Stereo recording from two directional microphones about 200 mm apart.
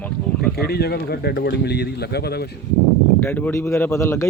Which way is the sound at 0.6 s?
50° left (ahead or behind).